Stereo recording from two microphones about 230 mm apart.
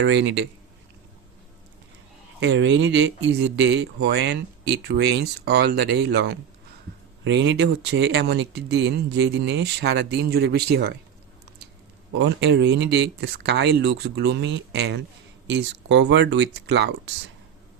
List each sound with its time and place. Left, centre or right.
0.0 s speech: right
2.4 s speech: right
12.2 s speech: right